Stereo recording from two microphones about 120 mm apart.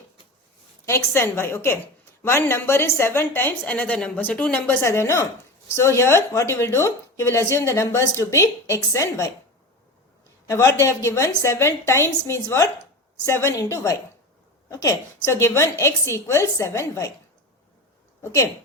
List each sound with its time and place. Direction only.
0.9 s a woman's voice: 20° left (ahead or behind)
10.4 s a woman's voice: 25° left (ahead or behind)
18.2 s speech: 20° left (ahead or behind)